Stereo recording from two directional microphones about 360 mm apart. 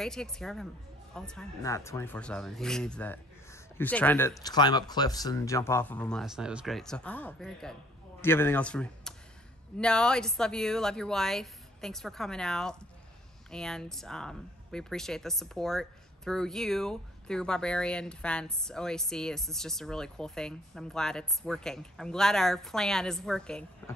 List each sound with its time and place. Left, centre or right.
0.0 s speech: centre